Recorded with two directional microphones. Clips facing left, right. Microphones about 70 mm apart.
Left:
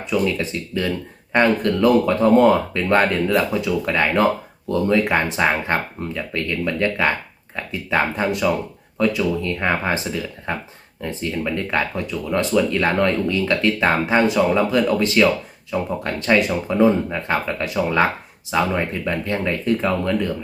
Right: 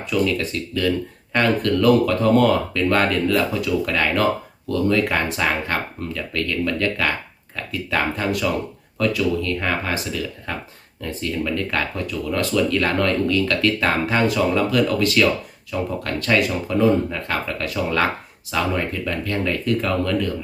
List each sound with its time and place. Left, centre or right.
0.1 s speech: left